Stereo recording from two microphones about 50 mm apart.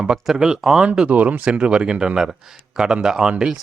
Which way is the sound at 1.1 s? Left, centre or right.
Right.